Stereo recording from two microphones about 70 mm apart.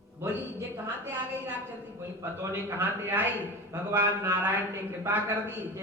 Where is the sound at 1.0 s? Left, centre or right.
Right.